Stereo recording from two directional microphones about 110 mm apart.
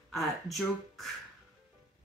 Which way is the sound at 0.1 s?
Centre (ahead or behind).